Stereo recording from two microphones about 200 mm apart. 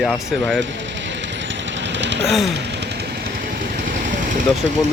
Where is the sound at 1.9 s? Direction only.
60° right (ahead or behind).